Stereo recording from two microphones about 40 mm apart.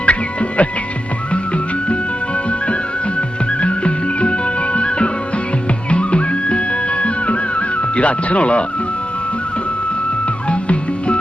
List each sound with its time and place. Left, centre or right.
0.0 s music: left
3.2 s music: left
10.5 s music: left